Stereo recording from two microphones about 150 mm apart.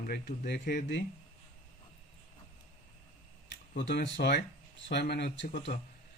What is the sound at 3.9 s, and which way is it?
Speech, 90° left.